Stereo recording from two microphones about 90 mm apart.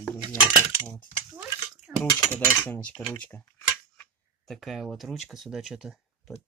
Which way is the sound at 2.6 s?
15° left (ahead or behind).